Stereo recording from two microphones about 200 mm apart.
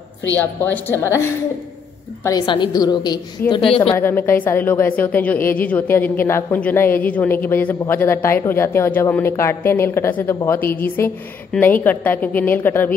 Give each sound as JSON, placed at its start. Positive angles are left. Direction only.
{"t": 0.4, "sound": "a woman's voice", "side_deg": 10}
{"t": 2.2, "sound": "a woman's voice", "side_deg": 20}
{"t": 3.9, "sound": "a woman's voice", "side_deg": 10}